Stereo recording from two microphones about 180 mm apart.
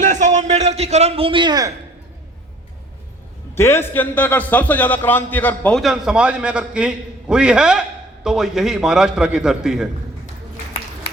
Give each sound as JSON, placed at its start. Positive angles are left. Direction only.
{"t": 0.0, "sound": "a man's voice", "side_deg": -45}
{"t": 3.5, "sound": "a man's voice", "side_deg": 15}